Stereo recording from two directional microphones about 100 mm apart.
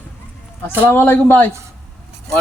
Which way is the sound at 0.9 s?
20° left (ahead or behind).